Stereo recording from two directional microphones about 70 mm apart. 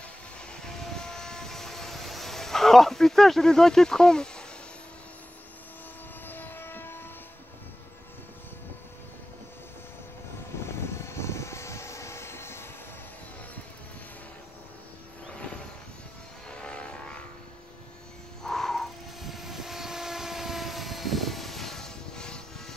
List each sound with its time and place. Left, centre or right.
0.5 s vehicle: centre
6.2 s vehicle: left
10.5 s vehicle: left
16.4 s vehicle: centre
18.4 s vehicle: centre